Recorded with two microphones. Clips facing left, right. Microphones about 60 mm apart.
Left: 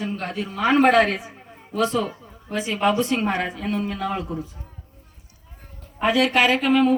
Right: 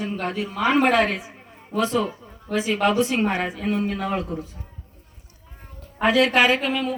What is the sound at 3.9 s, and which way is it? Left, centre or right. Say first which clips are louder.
Speech: right 1 dB; right.